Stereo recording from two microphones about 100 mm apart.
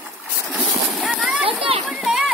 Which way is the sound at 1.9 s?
5° right (ahead or behind).